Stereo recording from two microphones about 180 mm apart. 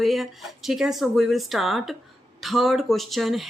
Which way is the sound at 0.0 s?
Centre (ahead or behind).